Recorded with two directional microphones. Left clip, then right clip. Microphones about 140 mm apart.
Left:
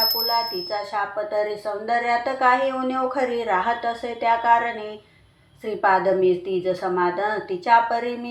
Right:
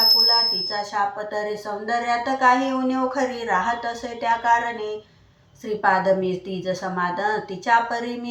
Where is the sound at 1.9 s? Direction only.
30° left (ahead or behind).